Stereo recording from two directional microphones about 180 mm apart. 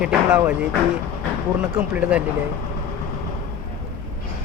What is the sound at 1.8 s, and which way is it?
Speech, 5° right (ahead or behind).